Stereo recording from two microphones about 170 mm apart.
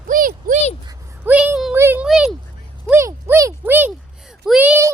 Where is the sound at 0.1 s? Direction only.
55° right (ahead or behind).